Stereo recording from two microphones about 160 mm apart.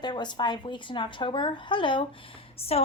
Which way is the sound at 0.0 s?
25° left (ahead or behind).